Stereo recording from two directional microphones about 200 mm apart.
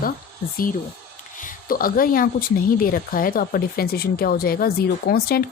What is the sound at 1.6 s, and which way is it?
Speech, 45° left (ahead or behind).